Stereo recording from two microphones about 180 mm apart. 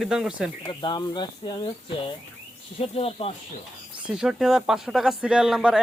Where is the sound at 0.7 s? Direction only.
25° left (ahead or behind).